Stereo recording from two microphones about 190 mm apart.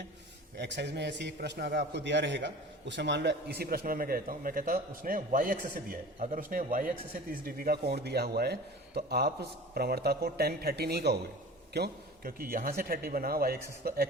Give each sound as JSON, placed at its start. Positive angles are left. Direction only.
{"t": 0.5, "sound": "a man's voice", "side_deg": -60}